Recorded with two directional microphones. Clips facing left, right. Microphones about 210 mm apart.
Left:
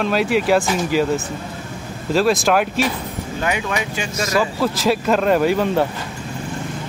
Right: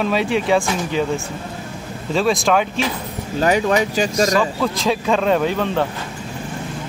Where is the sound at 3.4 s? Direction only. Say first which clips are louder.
Right 7 dB; 35° right (ahead or behind).